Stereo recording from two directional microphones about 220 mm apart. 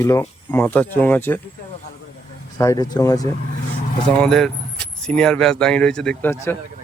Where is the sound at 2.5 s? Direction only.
15° left (ahead or behind).